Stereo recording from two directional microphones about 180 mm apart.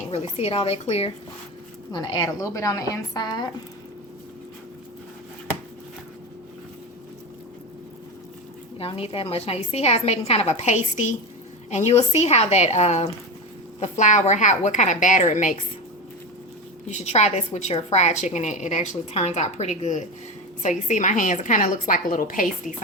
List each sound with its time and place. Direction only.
0.1 s a woman's voice: 35° left (ahead or behind)
8.8 s a woman's voice: 30° left (ahead or behind)
16.9 s a woman's voice: 40° left (ahead or behind)